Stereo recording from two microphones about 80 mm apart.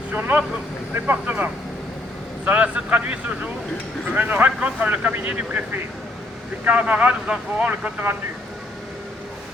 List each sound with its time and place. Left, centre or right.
0.1 s speech: right
2.4 s speech: centre
6.7 s speech: centre